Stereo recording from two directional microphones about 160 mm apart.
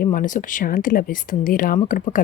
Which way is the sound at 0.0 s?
60° left (ahead or behind).